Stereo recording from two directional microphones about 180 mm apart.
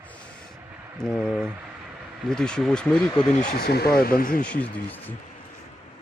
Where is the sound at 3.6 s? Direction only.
60° left (ahead or behind).